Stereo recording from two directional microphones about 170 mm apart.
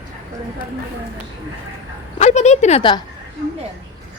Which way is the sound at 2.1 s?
40° left (ahead or behind).